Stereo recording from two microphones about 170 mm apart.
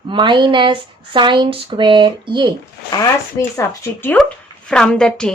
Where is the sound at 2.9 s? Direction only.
20° left (ahead or behind).